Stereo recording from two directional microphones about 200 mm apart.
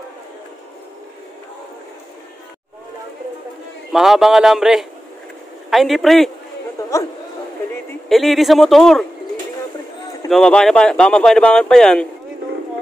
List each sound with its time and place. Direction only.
3.9 s speech: centre (ahead or behind)
6.8 s chatter: 15° left (ahead or behind)
8.1 s speech: centre (ahead or behind)
10.3 s speech: 5° left (ahead or behind)